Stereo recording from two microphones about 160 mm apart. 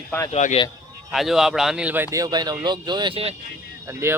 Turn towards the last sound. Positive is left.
turn(degrees=-15)  # may be behind; listen again after turning